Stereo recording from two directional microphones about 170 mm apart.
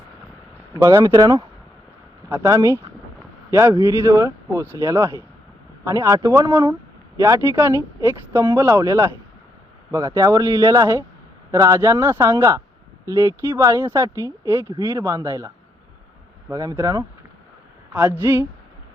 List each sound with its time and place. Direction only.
0.7 s speech: 20° right (ahead or behind)
18.2 s speech: 15° right (ahead or behind)